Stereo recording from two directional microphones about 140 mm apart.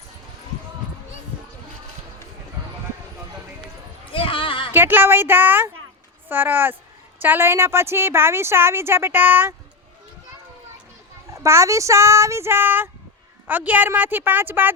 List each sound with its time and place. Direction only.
4.1 s a sound: 40° left (ahead or behind)
4.7 s speech: 15° right (ahead or behind)
11.3 s speech: 20° right (ahead or behind)